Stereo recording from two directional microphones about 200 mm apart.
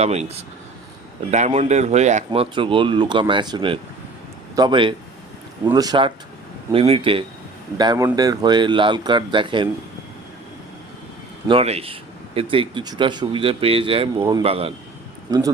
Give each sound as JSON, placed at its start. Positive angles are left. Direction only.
{"t": 0.0, "sound": "speech", "side_deg": -35}
{"t": 11.4, "sound": "speech", "side_deg": -30}